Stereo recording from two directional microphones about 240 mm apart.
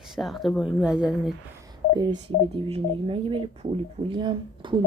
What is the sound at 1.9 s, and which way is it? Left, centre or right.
Speech, centre.